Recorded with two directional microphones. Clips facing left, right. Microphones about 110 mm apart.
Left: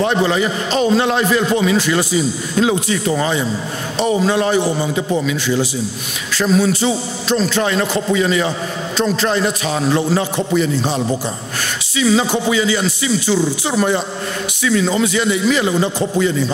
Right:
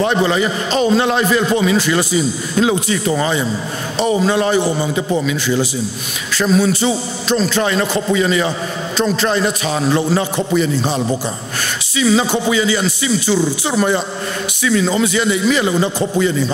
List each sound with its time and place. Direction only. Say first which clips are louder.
0.0 s a man's voice: right 1 dB; 20° right (ahead or behind)
6.3 s a man's voice: right 1 dB; 20° right (ahead or behind)
12.0 s a man's voice: right 1 dB; 20° right (ahead or behind)